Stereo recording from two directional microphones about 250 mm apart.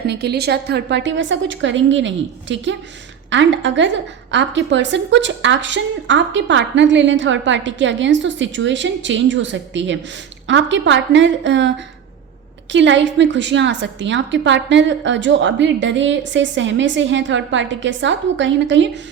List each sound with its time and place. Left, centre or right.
0.1 s a woman's voice: right
12.7 s a woman's voice: right